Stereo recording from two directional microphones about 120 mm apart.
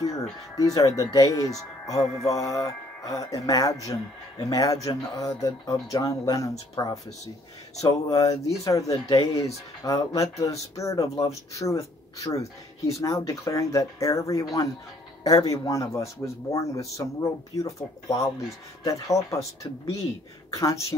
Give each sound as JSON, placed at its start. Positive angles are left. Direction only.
{"t": 0.6, "sound": "speech", "side_deg": 30}